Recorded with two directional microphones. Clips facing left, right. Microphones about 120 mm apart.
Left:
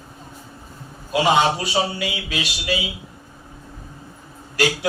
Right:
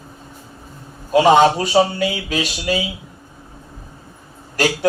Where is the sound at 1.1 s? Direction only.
45° right (ahead or behind).